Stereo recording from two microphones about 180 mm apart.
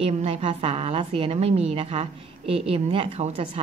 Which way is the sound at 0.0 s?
35° right (ahead or behind).